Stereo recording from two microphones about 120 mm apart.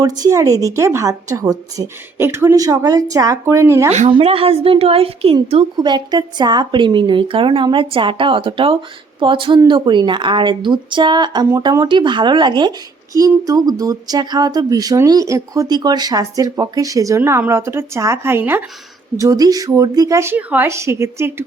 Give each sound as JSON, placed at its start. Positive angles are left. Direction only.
{"t": 0.0, "sound": "a woman's voice", "side_deg": -30}
{"t": 4.2, "sound": "speech", "side_deg": -50}
{"t": 5.7, "sound": "a woman's voice", "side_deg": -35}
{"t": 19.1, "sound": "a woman's voice", "side_deg": -30}